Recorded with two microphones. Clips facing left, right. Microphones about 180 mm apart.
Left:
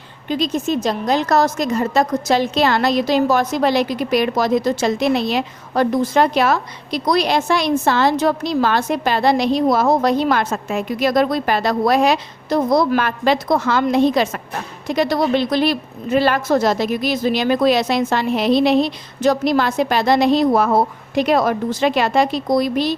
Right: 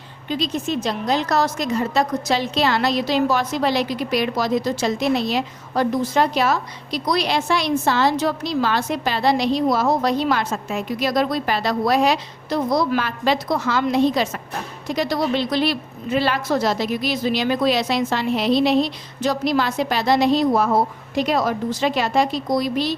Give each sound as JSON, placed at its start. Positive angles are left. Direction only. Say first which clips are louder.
{"t": 0.3, "sound": "a woman's voice", "louder": "left 4 dB", "side_deg": 45}